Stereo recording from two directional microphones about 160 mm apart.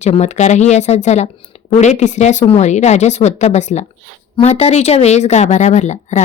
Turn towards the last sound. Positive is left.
turn(degrees=45)  # may be behind; listen again after turning